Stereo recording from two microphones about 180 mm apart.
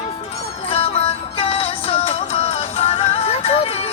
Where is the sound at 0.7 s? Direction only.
35° left (ahead or behind).